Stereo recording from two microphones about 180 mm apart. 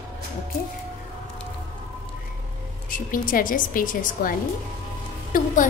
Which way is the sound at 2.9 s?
50° left (ahead or behind).